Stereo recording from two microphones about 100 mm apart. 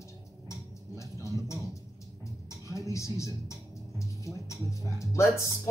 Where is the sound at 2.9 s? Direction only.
30° left (ahead or behind).